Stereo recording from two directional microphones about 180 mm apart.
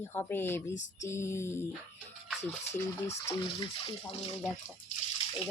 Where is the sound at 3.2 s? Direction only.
25° left (ahead or behind).